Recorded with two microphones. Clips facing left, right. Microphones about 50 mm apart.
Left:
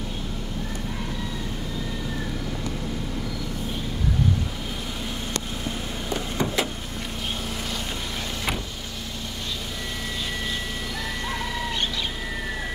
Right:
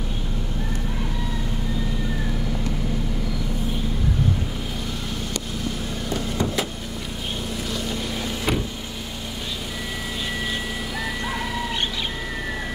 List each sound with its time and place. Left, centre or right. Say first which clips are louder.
6.3 s vehicle: left 1 dB; left
7.7 s vehicle: right 3 dB; centre